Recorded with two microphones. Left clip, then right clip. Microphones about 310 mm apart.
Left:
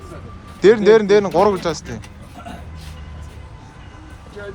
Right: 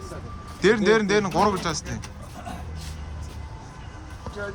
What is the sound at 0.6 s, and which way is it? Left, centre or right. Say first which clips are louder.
Speech: left 8 dB; centre.